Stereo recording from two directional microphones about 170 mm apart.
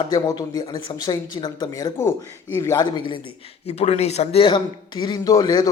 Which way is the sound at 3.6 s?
40° left (ahead or behind).